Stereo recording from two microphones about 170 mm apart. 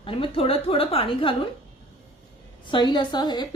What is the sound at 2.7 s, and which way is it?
Speech, 25° left (ahead or behind).